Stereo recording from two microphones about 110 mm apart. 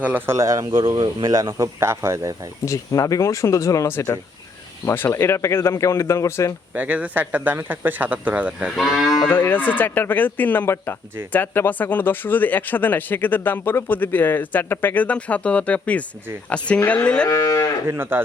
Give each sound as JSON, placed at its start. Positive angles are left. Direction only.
{"t": 0.0, "sound": "speech", "side_deg": -15}
{"t": 0.3, "sound": "a man's voice", "side_deg": -30}
{"t": 0.9, "sound": "speech", "side_deg": -40}
{"t": 2.6, "sound": "speech", "side_deg": 30}
{"t": 6.7, "sound": "speech", "side_deg": -15}
{"t": 8.7, "sound": "moo", "side_deg": 0}
{"t": 9.3, "sound": "speech", "side_deg": 20}
{"t": 17.2, "sound": "speech", "side_deg": 30}
{"t": 17.8, "sound": "speech", "side_deg": -20}